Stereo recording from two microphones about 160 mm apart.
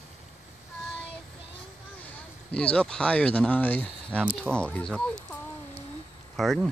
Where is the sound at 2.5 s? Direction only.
5° left (ahead or behind).